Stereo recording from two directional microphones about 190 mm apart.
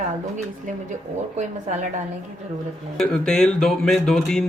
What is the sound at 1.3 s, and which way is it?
Speech, 40° right (ahead or behind).